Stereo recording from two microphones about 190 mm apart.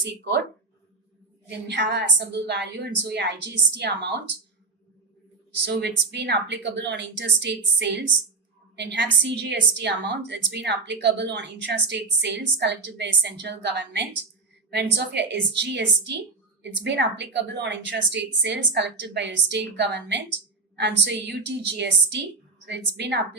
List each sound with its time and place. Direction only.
0.0 s a woman's voice: 65° right (ahead or behind)
1.5 s a woman's voice: 65° right (ahead or behind)
5.8 s a woman's voice: 65° right (ahead or behind)